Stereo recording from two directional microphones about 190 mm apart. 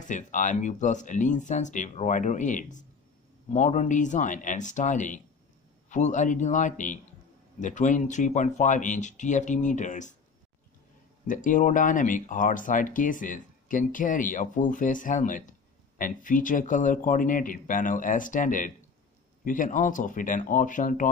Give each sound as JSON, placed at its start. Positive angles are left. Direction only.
{"t": 0.0, "sound": "speech", "side_deg": 40}
{"t": 11.2, "sound": "speech", "side_deg": 45}